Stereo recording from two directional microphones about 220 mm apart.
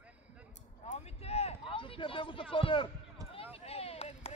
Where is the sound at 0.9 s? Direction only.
30° left (ahead or behind).